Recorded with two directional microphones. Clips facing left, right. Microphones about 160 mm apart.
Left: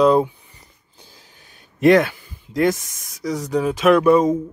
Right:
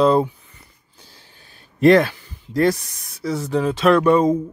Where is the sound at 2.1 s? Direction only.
15° left (ahead or behind).